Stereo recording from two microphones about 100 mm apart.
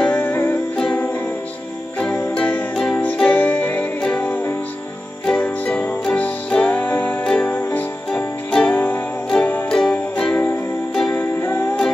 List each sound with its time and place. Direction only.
0.0 s music: 15° left (ahead or behind)
9.7 s music: 10° left (ahead or behind)